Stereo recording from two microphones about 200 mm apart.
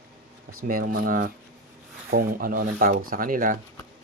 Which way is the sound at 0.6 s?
45° right (ahead or behind).